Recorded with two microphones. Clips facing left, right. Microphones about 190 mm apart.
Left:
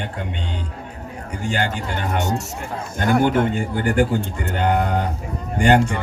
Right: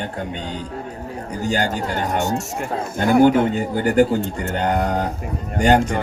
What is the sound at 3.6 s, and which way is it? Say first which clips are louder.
A man's voice: right 3 dB; 40° right (ahead or behind).